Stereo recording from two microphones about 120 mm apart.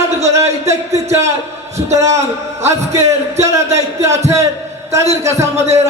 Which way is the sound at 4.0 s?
25° right (ahead or behind).